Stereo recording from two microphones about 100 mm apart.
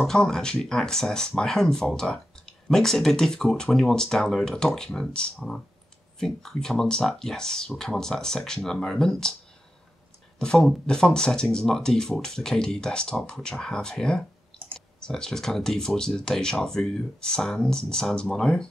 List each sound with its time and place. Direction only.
0.0 s speech: 5° left (ahead or behind)
10.4 s speech: 10° left (ahead or behind)